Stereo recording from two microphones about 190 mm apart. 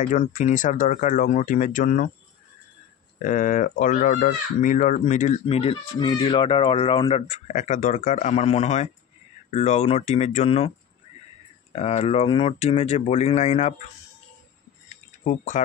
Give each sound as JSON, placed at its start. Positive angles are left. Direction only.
{"t": 0.0, "sound": "speech", "side_deg": 40}
{"t": 3.2, "sound": "speech", "side_deg": 45}
{"t": 11.7, "sound": "speech", "side_deg": 35}
{"t": 15.2, "sound": "speech", "side_deg": 40}